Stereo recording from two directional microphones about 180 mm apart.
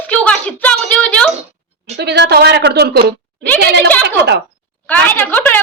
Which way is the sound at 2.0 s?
70° right (ahead or behind).